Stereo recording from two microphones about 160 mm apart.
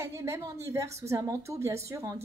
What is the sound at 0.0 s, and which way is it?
A woman's voice, 15° right (ahead or behind).